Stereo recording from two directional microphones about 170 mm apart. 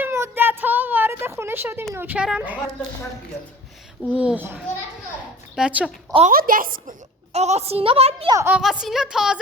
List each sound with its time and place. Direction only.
0.0 s child singing: 15° right (ahead or behind)
1.9 s a woman's voice: 10° right (ahead or behind)
4.1 s a woman's voice: 5° right (ahead or behind)
6.3 s a woman's voice: 55° right (ahead or behind)
7.3 s a woman's voice: 40° right (ahead or behind)
8.3 s a woman's voice: 15° right (ahead or behind)
8.5 s speech: 5° right (ahead or behind)